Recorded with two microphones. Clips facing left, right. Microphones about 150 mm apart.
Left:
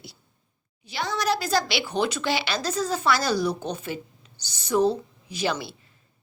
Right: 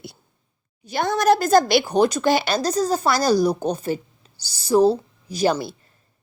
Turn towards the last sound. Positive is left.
turn(degrees=-40)  # may be behind; listen again after turning